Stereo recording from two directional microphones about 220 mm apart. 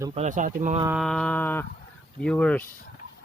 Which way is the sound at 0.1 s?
30° right (ahead or behind).